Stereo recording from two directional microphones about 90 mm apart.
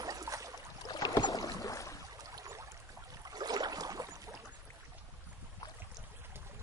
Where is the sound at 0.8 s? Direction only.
45° left (ahead or behind).